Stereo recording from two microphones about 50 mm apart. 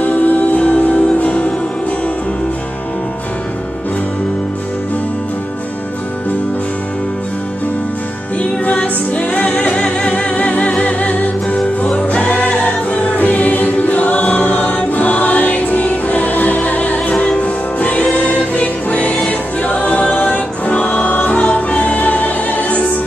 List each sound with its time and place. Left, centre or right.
0.0 s music: left
8.4 s music: left
11.8 s choir: left
17.2 s music: left